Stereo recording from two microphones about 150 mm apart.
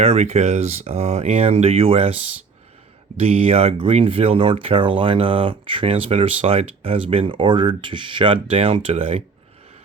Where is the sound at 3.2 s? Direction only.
45° right (ahead or behind).